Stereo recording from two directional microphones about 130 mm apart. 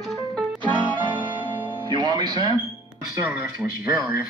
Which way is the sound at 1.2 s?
35° right (ahead or behind).